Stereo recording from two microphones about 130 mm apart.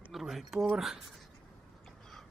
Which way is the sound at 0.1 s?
Centre (ahead or behind).